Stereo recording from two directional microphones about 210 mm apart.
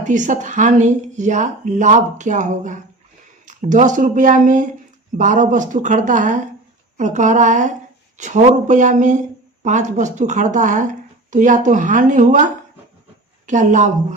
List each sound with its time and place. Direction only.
0.0 s speech: 35° right (ahead or behind)
13.5 s speech: 35° right (ahead or behind)